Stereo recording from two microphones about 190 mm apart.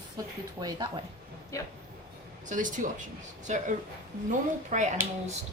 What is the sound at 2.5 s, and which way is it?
A woman's voice, 45° right (ahead or behind).